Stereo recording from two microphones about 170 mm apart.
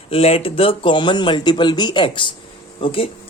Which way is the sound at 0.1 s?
35° left (ahead or behind).